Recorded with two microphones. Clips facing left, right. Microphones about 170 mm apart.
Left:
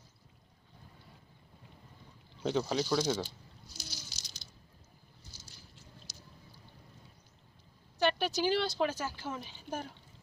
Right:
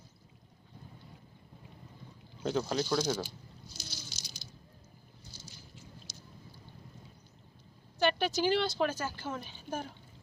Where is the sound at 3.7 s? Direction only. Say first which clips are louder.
Even; 35° left (ahead or behind).